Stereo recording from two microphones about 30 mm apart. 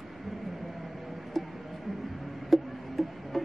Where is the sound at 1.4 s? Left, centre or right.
Centre.